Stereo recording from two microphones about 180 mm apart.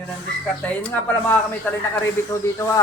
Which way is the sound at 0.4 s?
10° left (ahead or behind).